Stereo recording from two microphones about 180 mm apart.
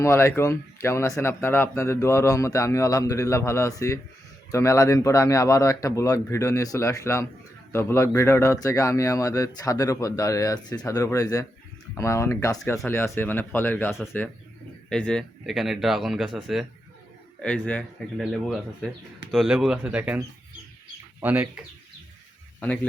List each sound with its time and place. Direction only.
0.0 s speech: 15° left (ahead or behind); by 21.6 s 10° right (ahead or behind)
22.6 s speech: 10° left (ahead or behind)